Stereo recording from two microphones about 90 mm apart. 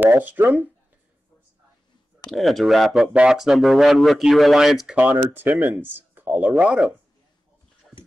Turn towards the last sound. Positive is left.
turn(degrees=-10)  # may be behind; listen again after turning